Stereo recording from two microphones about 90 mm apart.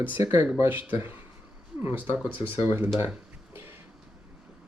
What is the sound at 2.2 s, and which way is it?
Speech, 25° right (ahead or behind).